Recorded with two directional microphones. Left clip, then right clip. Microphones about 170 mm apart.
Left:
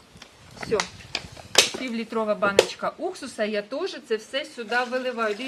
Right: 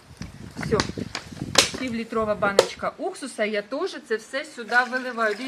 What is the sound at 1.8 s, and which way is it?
Speech, 20° left (ahead or behind).